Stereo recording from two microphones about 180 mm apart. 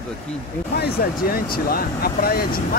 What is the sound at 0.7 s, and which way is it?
Speech, 60° left (ahead or behind).